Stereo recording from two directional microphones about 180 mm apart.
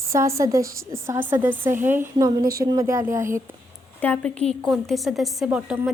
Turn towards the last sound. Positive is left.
turn(degrees=-5)  # may be behind; listen again after turning